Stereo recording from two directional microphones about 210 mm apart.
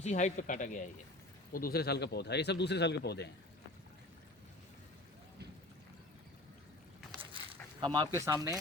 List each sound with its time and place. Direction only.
0.0 s speech: 35° left (ahead or behind); by 3.2 s 50° left (ahead or behind)
7.8 s speech: 20° right (ahead or behind)